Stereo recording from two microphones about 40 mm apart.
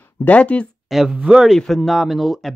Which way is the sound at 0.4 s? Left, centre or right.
Left.